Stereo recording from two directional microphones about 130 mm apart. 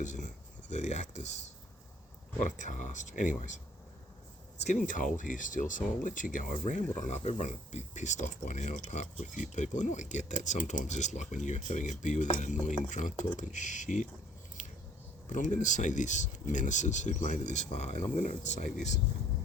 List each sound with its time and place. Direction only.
0.0 s speech: 70° left (ahead or behind)
2.4 s speech: 75° left (ahead or behind)
4.6 s speech: 80° left
6.9 s speech: 65° left (ahead or behind)
15.3 s speech: 70° left (ahead or behind)